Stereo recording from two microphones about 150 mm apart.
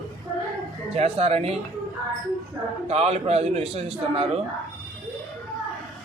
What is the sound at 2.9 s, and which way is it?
A man's voice, 45° right (ahead or behind).